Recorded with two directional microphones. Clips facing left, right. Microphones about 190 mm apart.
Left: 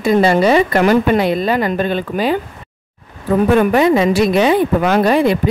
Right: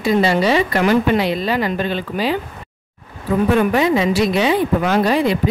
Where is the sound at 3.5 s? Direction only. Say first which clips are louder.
Left 4 dB; 50° left (ahead or behind).